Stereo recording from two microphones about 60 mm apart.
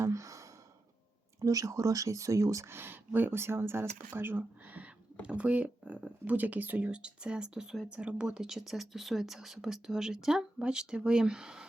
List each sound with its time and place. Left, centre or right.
0.0 s gasp: right
1.4 s speech: right
2.6 s speech: right; by 11.7 s centre